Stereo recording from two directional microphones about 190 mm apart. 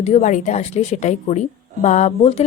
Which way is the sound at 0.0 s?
35° left (ahead or behind).